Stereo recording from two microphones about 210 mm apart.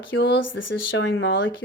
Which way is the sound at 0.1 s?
60° left (ahead or behind).